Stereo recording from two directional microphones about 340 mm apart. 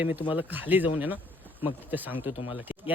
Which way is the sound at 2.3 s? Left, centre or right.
Centre.